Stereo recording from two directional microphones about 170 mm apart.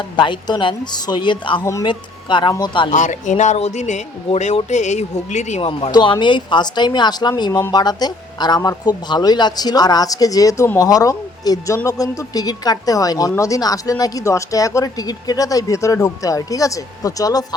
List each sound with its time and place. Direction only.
0.2 s speech: 25° left (ahead or behind)
2.9 s speech: 45° left (ahead or behind); by 17.4 s 20° left (ahead or behind)